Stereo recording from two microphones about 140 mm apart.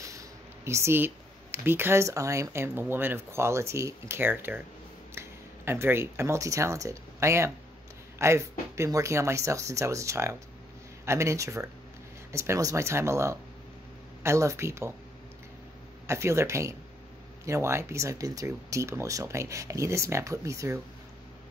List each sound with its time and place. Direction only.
0.0 s speech: 25° right (ahead or behind)
16.1 s speech: 20° right (ahead or behind)